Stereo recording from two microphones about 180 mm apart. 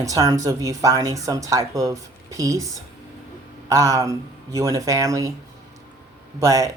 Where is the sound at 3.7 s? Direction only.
20° right (ahead or behind).